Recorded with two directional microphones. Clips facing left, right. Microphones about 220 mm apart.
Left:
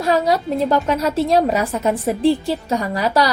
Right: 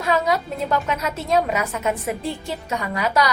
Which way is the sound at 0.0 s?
35° left (ahead or behind).